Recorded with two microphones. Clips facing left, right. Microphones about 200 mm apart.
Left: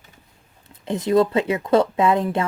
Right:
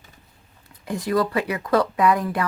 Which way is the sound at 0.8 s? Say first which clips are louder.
Left 5 dB; 25° left (ahead or behind).